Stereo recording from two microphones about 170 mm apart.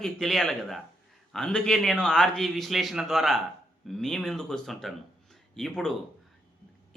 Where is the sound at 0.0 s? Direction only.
Centre (ahead or behind).